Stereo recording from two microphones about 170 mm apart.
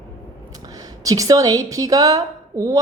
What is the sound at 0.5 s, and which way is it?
A woman's voice, 20° right (ahead or behind).